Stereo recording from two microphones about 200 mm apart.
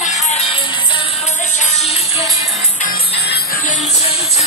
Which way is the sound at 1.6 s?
30° left (ahead or behind).